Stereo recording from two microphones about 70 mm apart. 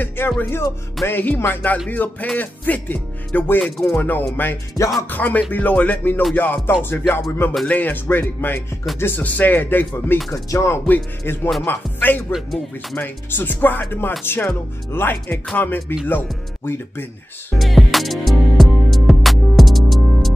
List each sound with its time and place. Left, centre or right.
0.4 s speech: left
3.6 s speech: centre
3.9 s speech: left
10.5 s speech: left
10.9 s speech: left
12.3 s speech: centre
12.9 s speech: left
17.6 s music: centre